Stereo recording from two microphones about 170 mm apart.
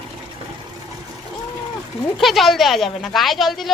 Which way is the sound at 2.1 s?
Centre (ahead or behind).